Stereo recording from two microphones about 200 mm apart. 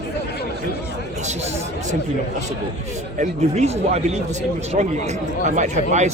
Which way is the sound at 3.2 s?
35° right (ahead or behind).